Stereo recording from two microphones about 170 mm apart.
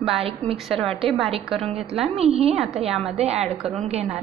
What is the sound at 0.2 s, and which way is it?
Speech, 35° right (ahead or behind).